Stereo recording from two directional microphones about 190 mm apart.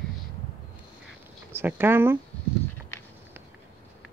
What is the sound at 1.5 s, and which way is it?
Speech, 10° right (ahead or behind).